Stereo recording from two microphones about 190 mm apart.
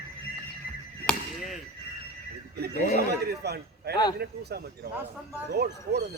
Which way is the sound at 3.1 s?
60° right (ahead or behind).